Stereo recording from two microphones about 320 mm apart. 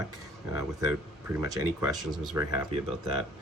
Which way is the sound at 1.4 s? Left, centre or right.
Centre.